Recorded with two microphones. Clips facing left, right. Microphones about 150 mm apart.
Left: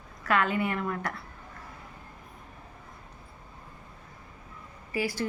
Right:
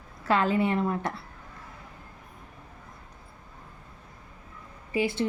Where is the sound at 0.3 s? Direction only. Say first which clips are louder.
Right 3 dB; 30° right (ahead or behind).